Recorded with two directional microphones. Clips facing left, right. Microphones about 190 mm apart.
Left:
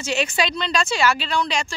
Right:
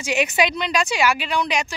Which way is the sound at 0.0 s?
15° right (ahead or behind).